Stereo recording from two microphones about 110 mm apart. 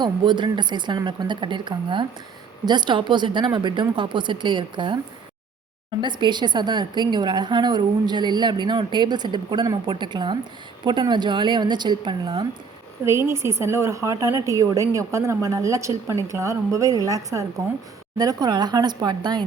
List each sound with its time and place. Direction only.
0.0 s a woman's voice: 45° right (ahead or behind)
6.0 s a woman's voice: 45° right (ahead or behind)
13.1 s a woman's voice: 25° right (ahead or behind); by 19.5 s 40° right (ahead or behind)